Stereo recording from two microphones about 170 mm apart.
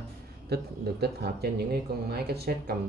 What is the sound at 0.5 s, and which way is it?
Speech, 70° right (ahead or behind).